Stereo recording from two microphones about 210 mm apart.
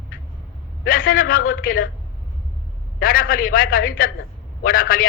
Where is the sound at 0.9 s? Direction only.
45° left (ahead or behind).